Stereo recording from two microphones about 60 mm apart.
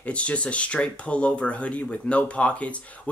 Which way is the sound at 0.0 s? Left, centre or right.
Left.